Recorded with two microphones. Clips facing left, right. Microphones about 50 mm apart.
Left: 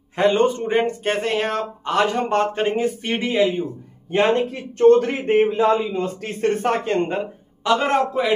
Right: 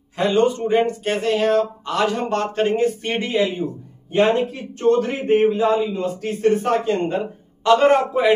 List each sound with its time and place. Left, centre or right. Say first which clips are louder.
0.1 s a man's voice: left 1 dB; left
2.5 s speech: right 2 dB; centre
2.8 s a man's voice: right 2 dB; centre
4.1 s speech: right 1 dB; left
7.6 s a man's voice: right 4 dB; centre